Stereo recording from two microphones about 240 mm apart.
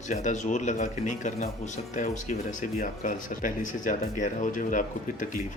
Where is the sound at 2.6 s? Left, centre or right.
Left.